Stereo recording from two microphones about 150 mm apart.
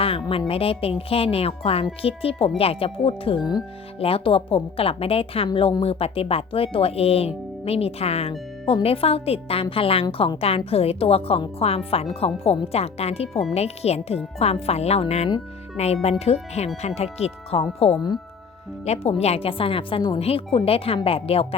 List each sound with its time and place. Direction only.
0.0 s speech: 40° left (ahead or behind)